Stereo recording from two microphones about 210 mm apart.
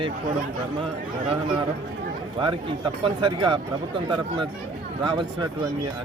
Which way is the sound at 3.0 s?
25° right (ahead or behind).